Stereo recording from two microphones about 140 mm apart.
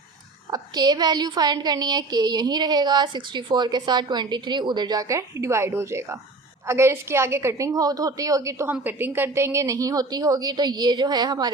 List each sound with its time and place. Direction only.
0.5 s a woman's voice: 30° right (ahead or behind)